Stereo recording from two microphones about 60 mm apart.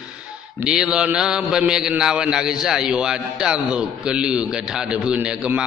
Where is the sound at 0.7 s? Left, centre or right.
Centre.